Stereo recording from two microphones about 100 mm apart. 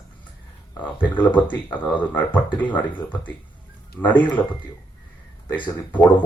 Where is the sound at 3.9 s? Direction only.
15° left (ahead or behind).